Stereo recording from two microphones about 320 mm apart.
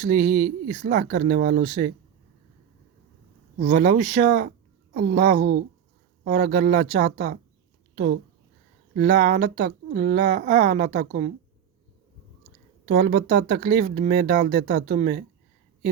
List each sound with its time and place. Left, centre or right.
0.0 s speech: right
3.6 s speech: right
12.9 s speech: right